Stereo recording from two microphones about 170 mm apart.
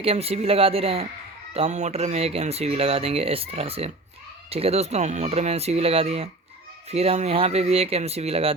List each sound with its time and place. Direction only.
0.0 s speech: 35° right (ahead or behind)